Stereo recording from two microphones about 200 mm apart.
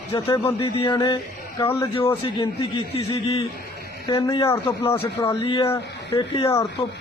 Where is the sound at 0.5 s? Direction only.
25° left (ahead or behind).